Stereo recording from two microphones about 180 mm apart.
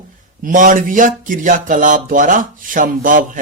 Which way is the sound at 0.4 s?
45° right (ahead or behind).